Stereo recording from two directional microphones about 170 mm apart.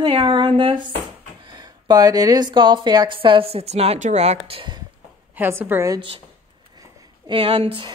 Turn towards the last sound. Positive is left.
turn(degrees=-35)  # may be behind; listen again after turning